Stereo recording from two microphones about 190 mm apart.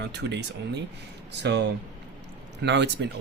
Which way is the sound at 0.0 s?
65° right (ahead or behind).